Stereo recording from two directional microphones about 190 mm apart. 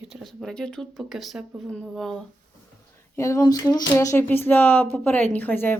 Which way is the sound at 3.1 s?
15° left (ahead or behind).